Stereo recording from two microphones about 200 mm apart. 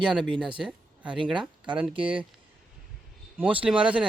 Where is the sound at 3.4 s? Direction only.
5° right (ahead or behind).